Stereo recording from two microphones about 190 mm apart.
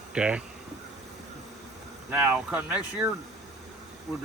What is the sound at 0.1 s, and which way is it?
Speech, 5° right (ahead or behind).